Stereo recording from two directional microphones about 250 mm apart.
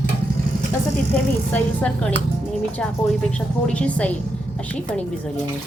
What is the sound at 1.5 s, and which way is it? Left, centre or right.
Speech, centre.